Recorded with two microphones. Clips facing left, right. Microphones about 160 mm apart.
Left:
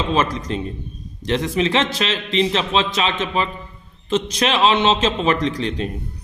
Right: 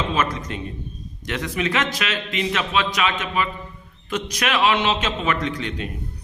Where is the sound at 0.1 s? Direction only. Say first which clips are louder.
Left 4 dB; 30° left (ahead or behind).